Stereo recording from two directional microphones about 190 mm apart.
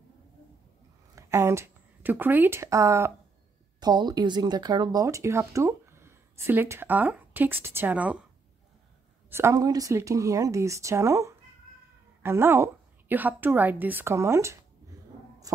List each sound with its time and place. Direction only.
1.1 s a woman's voice: 15° right (ahead or behind)
9.3 s speech: 15° right (ahead or behind)